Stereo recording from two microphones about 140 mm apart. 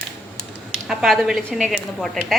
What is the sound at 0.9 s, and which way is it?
Speech, 5° right (ahead or behind).